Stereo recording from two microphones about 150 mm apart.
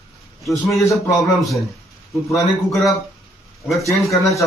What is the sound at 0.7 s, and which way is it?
Speech, 20° left (ahead or behind).